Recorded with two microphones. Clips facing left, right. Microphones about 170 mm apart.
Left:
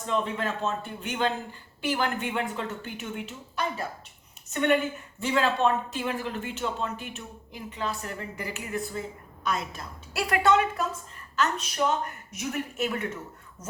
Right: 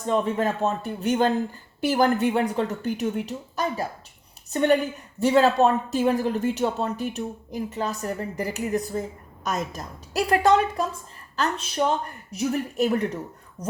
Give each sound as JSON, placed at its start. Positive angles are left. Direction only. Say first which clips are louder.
{"t": 0.1, "sound": "a man's voice", "louder": "right 6 dB", "side_deg": -45}